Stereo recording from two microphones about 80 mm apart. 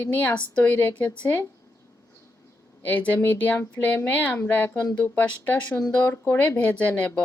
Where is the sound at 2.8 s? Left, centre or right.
Centre.